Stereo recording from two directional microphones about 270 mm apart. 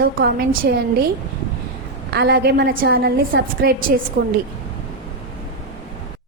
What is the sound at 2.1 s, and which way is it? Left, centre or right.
A woman's voice, right.